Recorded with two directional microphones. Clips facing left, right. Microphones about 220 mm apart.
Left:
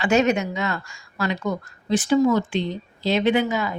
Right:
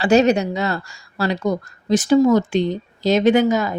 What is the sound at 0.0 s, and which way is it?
A woman's voice, 35° right (ahead or behind).